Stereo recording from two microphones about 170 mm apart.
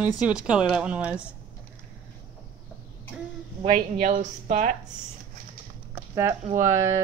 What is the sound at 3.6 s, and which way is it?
Speech, 50° right (ahead or behind).